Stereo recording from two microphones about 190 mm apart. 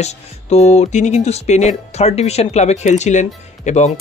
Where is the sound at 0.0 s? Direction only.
35° left (ahead or behind).